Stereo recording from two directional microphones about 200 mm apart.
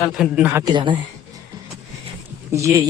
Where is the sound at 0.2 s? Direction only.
5° right (ahead or behind).